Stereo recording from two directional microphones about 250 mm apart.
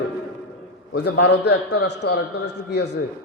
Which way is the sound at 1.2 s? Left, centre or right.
Left.